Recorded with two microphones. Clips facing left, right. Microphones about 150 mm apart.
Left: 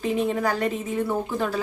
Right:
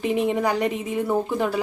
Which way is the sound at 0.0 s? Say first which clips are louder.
Right 2 dB; 15° right (ahead or behind).